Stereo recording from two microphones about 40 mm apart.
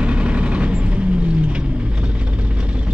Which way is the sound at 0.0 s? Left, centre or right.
Right.